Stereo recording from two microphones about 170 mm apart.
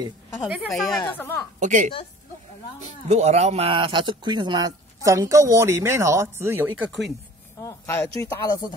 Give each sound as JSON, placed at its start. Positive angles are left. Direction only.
{"t": 0.4, "sound": "speech", "side_deg": -5}
{"t": 1.6, "sound": "a woman's voice", "side_deg": -45}
{"t": 7.6, "sound": "speech", "side_deg": 15}